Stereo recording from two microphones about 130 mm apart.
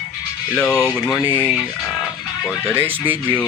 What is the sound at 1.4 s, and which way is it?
Speech, 10° left (ahead or behind).